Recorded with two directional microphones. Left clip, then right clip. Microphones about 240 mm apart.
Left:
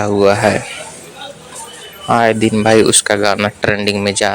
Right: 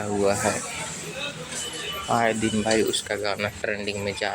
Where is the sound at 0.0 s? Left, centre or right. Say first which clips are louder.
Left 12 dB; left.